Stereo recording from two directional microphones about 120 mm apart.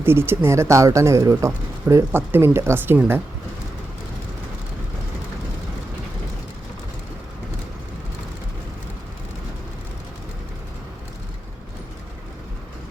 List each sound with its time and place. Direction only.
0.0 s speech: 20° right (ahead or behind)